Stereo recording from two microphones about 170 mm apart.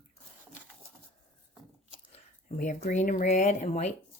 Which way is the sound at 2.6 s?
45° left (ahead or behind).